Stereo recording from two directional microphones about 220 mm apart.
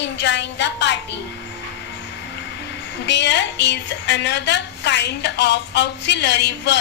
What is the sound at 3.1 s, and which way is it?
A woman's voice, 55° left (ahead or behind).